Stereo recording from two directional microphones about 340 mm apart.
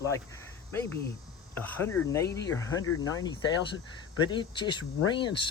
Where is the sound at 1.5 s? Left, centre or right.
Centre.